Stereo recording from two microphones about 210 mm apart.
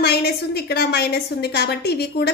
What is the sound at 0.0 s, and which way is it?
A woman's voice, 50° left (ahead or behind).